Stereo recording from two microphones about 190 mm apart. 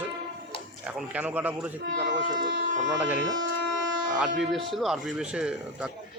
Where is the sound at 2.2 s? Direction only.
75° right (ahead or behind).